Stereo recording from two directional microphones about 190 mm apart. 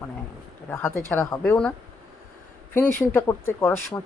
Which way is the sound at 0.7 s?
10° left (ahead or behind).